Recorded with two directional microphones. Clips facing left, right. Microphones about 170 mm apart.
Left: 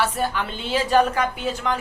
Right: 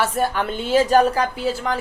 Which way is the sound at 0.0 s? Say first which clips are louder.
Right 3 dB; 45° right (ahead or behind).